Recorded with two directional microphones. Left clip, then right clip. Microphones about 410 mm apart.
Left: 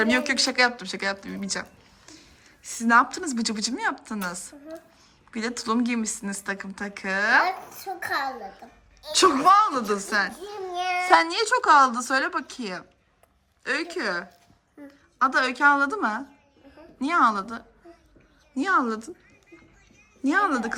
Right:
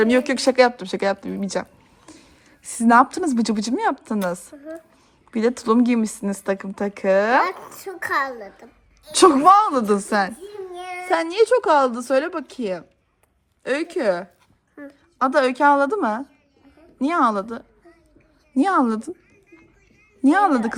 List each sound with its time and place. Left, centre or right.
0.0 s a woman's voice: centre
9.1 s speech: centre
10.8 s child singing: centre
11.1 s a woman's voice: centre
20.2 s speech: centre